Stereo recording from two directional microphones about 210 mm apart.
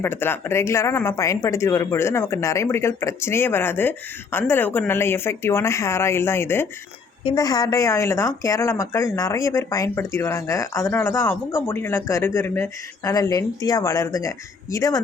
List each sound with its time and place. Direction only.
0.0 s speech: 10° left (ahead or behind)